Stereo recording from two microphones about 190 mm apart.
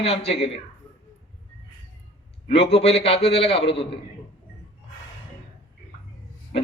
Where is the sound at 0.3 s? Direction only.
30° left (ahead or behind).